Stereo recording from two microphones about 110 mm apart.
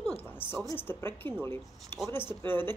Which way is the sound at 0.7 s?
20° left (ahead or behind).